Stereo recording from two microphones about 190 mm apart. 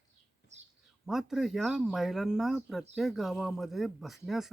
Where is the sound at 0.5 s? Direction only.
35° right (ahead or behind).